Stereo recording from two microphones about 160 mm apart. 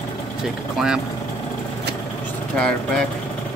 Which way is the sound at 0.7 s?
5° right (ahead or behind).